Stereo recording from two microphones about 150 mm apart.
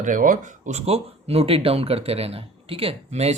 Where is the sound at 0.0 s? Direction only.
60° right (ahead or behind).